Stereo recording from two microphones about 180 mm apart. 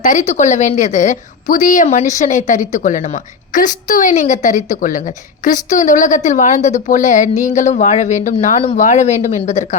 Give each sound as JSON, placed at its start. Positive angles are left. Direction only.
{"t": 0.0, "sound": "a woman's voice", "side_deg": 40}